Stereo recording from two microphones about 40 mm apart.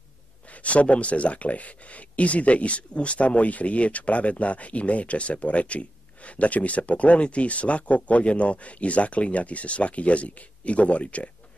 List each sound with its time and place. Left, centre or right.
0.5 s speech: left